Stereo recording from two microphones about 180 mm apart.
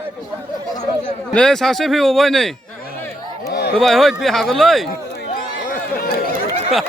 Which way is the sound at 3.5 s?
65° left (ahead or behind).